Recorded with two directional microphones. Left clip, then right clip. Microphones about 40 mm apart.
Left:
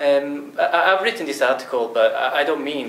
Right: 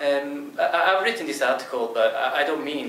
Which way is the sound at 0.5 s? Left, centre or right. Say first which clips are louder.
Left 3 dB; left.